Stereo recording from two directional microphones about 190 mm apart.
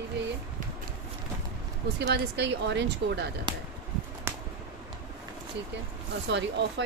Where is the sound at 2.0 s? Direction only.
60° right (ahead or behind).